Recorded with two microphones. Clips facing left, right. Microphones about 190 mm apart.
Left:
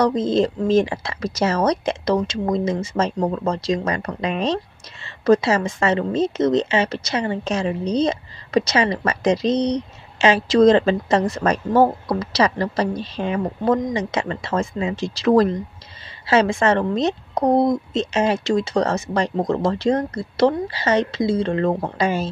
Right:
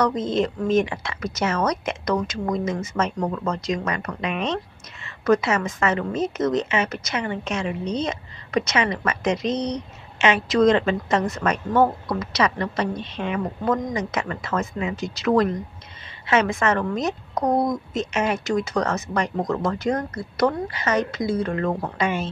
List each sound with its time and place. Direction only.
0.0 s a woman's voice: 35° left (ahead or behind)